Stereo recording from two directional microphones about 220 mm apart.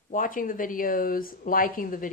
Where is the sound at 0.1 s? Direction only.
40° left (ahead or behind).